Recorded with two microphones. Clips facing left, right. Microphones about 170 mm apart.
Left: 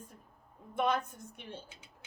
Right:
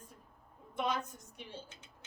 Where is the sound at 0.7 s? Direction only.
55° left (ahead or behind).